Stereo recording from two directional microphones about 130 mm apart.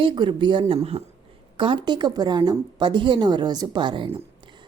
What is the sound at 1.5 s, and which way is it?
Speech, 40° right (ahead or behind).